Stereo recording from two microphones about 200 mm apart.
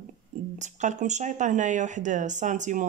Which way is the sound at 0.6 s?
35° right (ahead or behind).